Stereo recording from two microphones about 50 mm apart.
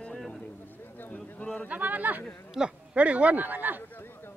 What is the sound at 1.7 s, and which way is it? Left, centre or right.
Speech, right.